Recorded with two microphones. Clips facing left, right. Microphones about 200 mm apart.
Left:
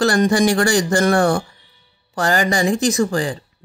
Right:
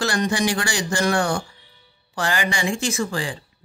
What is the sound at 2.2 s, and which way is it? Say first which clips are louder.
Speech: left 6 dB; 40° left (ahead or behind).